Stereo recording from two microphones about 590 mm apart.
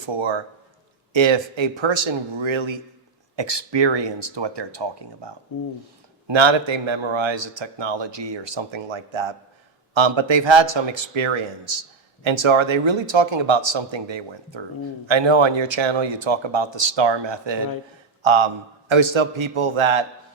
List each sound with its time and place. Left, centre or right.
0.0 s a man's voice: right
5.5 s speech: left
6.2 s a man's voice: right